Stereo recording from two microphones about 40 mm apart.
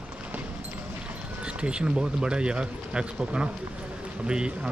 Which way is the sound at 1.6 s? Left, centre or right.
Right.